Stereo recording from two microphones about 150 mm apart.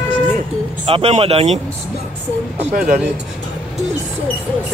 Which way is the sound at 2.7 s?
60° right (ahead or behind).